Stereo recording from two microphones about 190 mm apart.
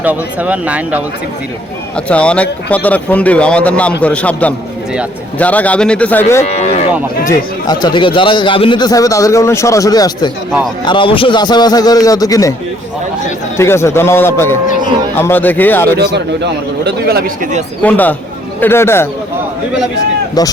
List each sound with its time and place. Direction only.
0.0 s speech: 10° right (ahead or behind)
2.0 s a man's voice: 5° left (ahead or behind)
6.4 s speech: 35° left (ahead or behind)
7.3 s speech: 20° left (ahead or behind)
13.6 s a man's voice: 15° left (ahead or behind)
16.0 s speech: 60° right (ahead or behind); by 17.6 s 45° right (ahead or behind)
17.8 s a man's voice: 10° left (ahead or behind)